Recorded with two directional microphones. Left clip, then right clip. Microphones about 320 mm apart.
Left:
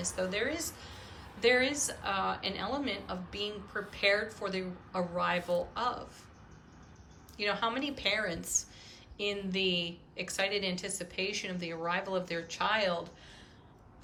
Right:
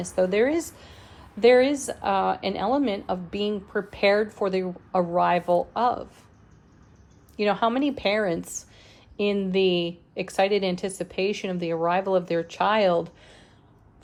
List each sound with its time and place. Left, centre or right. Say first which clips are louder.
0.0 s a woman's voice: right 11 dB; centre
7.3 s a woman's voice: right 9 dB; centre